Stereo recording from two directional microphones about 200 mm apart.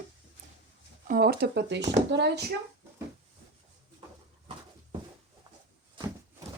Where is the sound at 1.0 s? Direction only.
45° right (ahead or behind).